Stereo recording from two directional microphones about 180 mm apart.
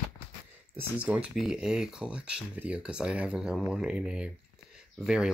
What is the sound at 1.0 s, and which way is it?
Speech, 5° right (ahead or behind).